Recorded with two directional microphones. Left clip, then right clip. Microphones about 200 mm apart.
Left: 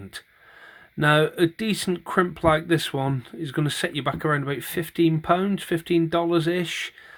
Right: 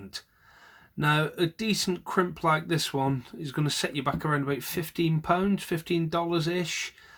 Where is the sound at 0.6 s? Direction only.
30° left (ahead or behind).